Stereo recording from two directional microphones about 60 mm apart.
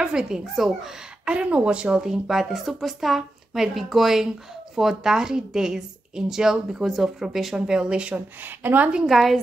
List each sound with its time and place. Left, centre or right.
0.0 s speech: centre
1.2 s speech: centre
8.4 s speech: right
9.0 s a woman's voice: centre